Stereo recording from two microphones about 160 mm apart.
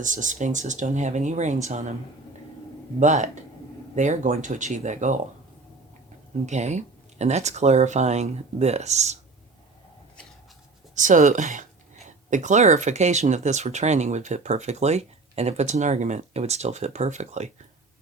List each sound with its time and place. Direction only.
0.0 s speech: 50° right (ahead or behind)
3.0 s speech: 50° right (ahead or behind)
6.4 s speech: 45° right (ahead or behind)
10.9 s speech: 50° right (ahead or behind)